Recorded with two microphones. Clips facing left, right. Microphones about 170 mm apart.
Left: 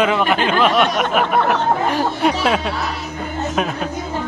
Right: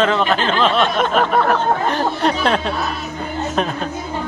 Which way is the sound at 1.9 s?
10° left (ahead or behind).